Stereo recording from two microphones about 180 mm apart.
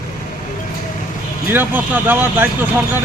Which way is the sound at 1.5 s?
10° right (ahead or behind).